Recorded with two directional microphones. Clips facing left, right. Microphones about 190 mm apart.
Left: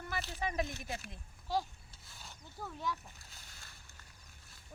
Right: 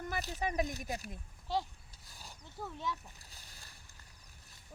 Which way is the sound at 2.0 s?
40° right (ahead or behind).